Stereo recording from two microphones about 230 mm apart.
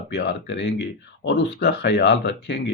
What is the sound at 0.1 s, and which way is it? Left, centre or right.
Speech, left.